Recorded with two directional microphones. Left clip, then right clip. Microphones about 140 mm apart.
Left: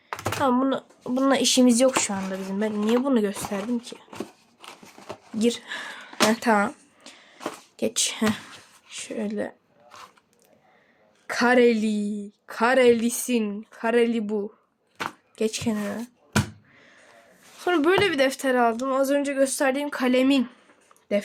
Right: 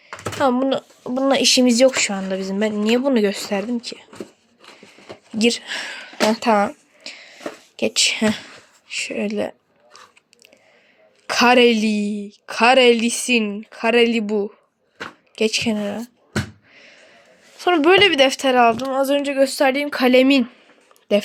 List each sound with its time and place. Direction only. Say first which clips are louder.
0.3 s speech: right 5 dB; 20° right (ahead or behind)
1.0 s a woman's voice: right 5 dB; 5° right (ahead or behind)
5.4 s speech: right 6 dB; 15° right (ahead or behind)
6.3 s speech: right 5 dB; 5° right (ahead or behind)
7.0 s a sound: right 11 dB; 15° right (ahead or behind)
7.8 s a woman's voice: right 8 dB; 10° right (ahead or behind)
11.3 s a woman's voice: right 6 dB; 20° right (ahead or behind)
16.7 s a sound: right 7 dB; 10° right (ahead or behind)
17.6 s a woman's voice: right 7 dB; 20° right (ahead or behind)
19.0 s speech: right 7 dB; 25° right (ahead or behind)